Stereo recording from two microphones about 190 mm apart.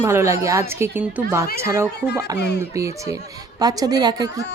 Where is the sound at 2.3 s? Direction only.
60° left (ahead or behind).